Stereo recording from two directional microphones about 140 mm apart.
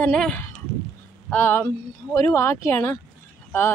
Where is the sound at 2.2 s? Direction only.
20° left (ahead or behind).